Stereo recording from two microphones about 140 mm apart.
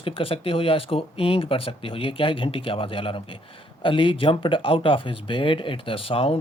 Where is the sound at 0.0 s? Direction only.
40° left (ahead or behind).